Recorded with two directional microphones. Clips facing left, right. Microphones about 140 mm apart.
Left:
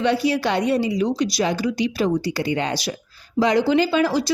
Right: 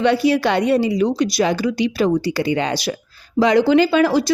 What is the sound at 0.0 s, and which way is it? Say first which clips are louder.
A woman's voice: right 4 dB; 65° right (ahead or behind).